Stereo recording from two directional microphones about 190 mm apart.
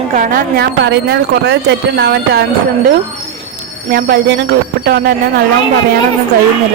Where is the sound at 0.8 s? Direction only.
65° right (ahead or behind).